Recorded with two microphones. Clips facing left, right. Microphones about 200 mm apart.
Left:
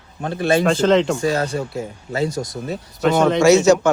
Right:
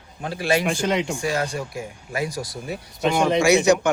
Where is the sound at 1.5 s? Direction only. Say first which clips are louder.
Left 5 dB; 30° left (ahead or behind).